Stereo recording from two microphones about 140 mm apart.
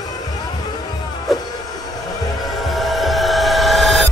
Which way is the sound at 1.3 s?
Centre (ahead or behind).